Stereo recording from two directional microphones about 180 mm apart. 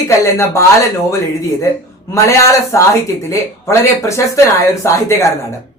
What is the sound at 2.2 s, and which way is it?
A woman's voice, 15° left (ahead or behind).